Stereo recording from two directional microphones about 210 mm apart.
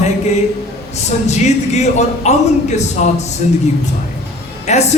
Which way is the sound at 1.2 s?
30° left (ahead or behind).